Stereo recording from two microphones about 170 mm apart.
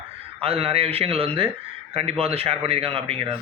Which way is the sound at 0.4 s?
35° right (ahead or behind).